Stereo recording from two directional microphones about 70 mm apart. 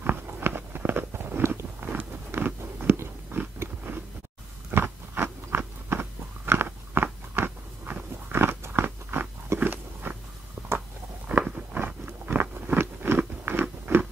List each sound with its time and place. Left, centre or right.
0.0 s a sound: right
1.8 s biting: right
11.4 s biting: centre
11.8 s biting: right